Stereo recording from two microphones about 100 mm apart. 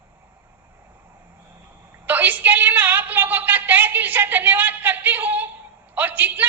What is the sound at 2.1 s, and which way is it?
A woman's voice, 20° right (ahead or behind).